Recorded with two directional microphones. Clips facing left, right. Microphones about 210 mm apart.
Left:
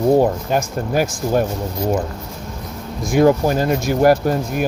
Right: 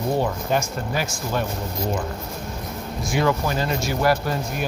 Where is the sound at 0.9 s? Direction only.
45° left (ahead or behind).